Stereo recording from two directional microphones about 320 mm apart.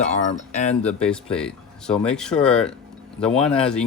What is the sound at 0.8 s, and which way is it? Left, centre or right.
Speech, centre.